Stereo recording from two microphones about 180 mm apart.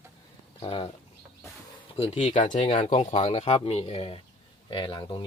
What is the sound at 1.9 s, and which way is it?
Speech, 35° left (ahead or behind).